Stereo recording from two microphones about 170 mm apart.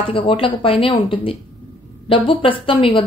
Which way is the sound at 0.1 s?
30° left (ahead or behind).